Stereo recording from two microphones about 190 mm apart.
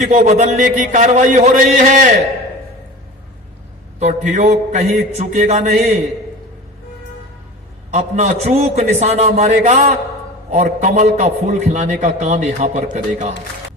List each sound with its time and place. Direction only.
0.0 s a man's voice: 40° right (ahead or behind)
4.0 s a man's voice: 40° right (ahead or behind)
7.9 s a man's voice: 40° right (ahead or behind)